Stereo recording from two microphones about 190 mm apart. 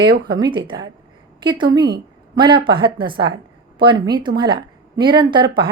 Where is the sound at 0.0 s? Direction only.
25° right (ahead or behind).